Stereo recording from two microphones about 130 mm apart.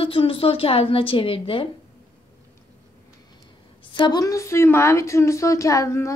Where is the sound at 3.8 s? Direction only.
35° left (ahead or behind).